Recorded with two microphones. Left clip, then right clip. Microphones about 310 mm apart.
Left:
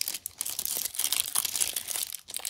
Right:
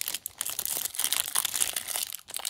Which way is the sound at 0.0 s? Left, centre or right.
Centre.